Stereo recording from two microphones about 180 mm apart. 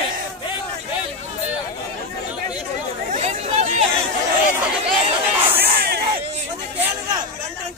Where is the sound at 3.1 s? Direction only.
40° right (ahead or behind).